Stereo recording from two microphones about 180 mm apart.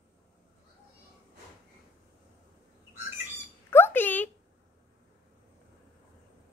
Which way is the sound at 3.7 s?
10° left (ahead or behind).